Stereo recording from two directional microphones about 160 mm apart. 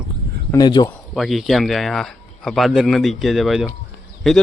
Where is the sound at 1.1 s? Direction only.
Centre (ahead or behind).